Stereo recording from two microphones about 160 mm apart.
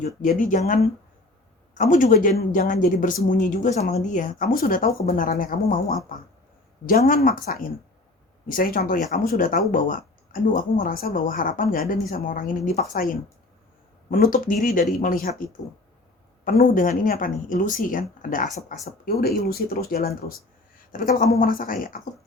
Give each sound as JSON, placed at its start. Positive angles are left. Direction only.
{"t": 0.2, "sound": "speech", "side_deg": 55}
{"t": 14.1, "sound": "speech", "side_deg": 60}
{"t": 18.9, "sound": "speech", "side_deg": 75}